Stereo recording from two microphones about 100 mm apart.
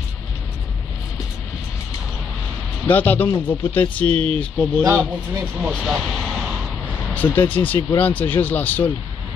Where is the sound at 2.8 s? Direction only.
20° left (ahead or behind).